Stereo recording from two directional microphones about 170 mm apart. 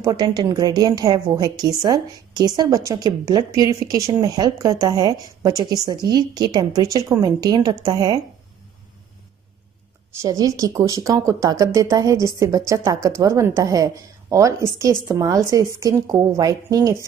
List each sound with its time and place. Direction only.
0.0 s speech: 25° right (ahead or behind)
10.2 s speech: 20° right (ahead or behind)